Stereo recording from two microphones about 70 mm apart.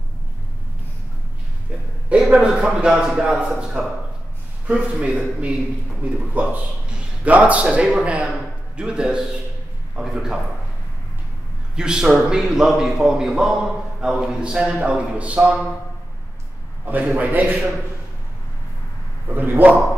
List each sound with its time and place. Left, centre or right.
2.0 s a man's voice: centre
11.7 s a man's voice: centre
16.8 s a man's voice: right
19.3 s a man's voice: right